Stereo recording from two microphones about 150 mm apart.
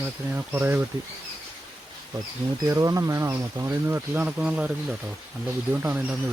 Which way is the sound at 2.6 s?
20° right (ahead or behind).